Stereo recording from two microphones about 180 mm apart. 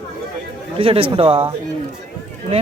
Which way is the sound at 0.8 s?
30° right (ahead or behind).